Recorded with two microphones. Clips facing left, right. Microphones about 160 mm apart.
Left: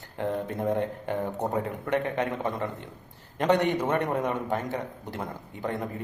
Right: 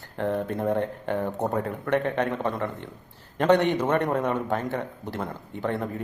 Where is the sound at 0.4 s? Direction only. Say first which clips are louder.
Right 2 dB; 15° left (ahead or behind).